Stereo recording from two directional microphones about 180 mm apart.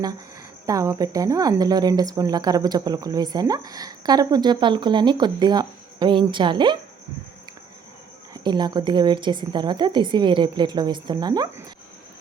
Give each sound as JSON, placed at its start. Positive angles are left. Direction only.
{"t": 0.6, "sound": "speech", "side_deg": -15}
{"t": 8.3, "sound": "speech", "side_deg": -25}